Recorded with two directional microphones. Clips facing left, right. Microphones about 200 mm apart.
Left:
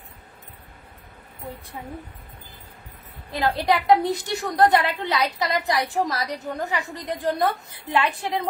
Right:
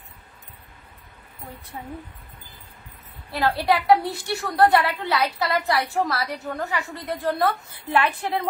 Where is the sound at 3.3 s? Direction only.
20° left (ahead or behind).